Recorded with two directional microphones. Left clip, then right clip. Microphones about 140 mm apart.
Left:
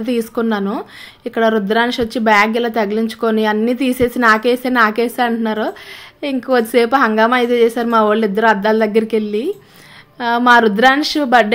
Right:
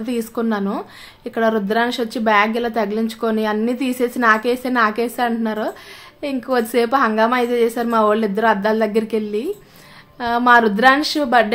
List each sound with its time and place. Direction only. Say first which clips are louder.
0.0 s speech: left 4 dB; 25° left (ahead or behind)